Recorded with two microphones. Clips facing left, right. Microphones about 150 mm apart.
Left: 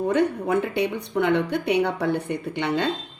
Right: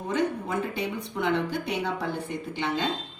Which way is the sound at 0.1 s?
65° left (ahead or behind).